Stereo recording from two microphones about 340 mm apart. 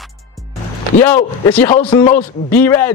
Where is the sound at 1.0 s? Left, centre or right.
Centre.